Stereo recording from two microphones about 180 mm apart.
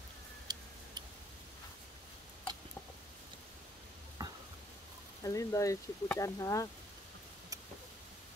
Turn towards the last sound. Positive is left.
turn(degrees=15)  # may be behind; listen again after turning